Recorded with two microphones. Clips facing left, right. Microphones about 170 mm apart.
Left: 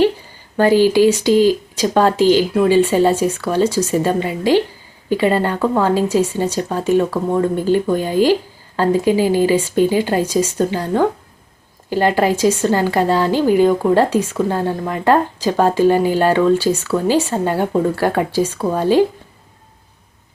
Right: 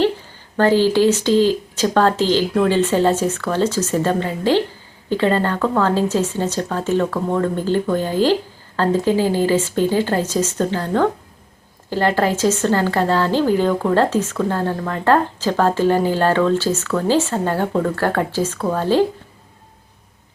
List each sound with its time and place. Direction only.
0.5 s a woman's voice: 10° left (ahead or behind)